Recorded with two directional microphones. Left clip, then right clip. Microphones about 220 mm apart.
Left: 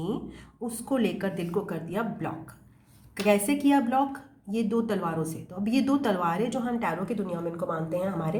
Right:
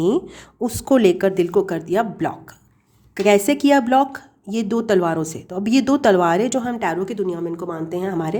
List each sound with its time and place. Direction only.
0.0 s a woman's voice: 45° right (ahead or behind)